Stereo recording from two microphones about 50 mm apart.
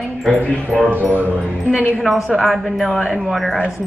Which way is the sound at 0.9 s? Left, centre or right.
Right.